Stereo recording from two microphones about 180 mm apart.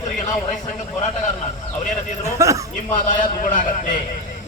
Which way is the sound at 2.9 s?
45° left (ahead or behind).